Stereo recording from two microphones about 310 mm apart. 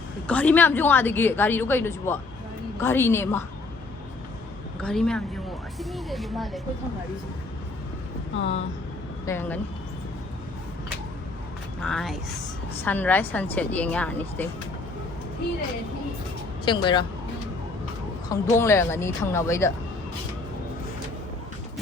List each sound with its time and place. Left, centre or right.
0.3 s a woman's voice: centre
4.8 s a woman's voice: centre
8.4 s speech: left
9.2 s a woman's voice: centre
11.8 s a woman's voice: centre
16.6 s a woman's voice: centre
18.3 s a woman's voice: centre